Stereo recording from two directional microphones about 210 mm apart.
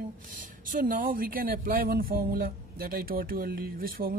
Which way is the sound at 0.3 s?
40° right (ahead or behind).